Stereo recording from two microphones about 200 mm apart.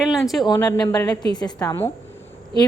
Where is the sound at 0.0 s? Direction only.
Centre (ahead or behind).